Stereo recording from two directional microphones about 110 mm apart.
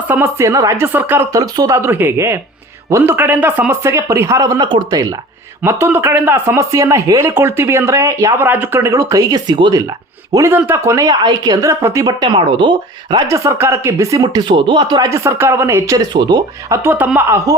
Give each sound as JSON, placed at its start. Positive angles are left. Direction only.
{"t": 0.1, "sound": "speech", "side_deg": -20}
{"t": 1.4, "sound": "speech", "side_deg": -35}
{"t": 5.6, "sound": "speech", "side_deg": -20}
{"t": 10.5, "sound": "speech", "side_deg": -25}
{"t": 12.2, "sound": "speech", "side_deg": -45}
{"t": 13.2, "sound": "speech", "side_deg": -30}
{"t": 14.2, "sound": "speech", "side_deg": -45}
{"t": 15.1, "sound": "speech", "side_deg": -25}
{"t": 16.9, "sound": "speech", "side_deg": -15}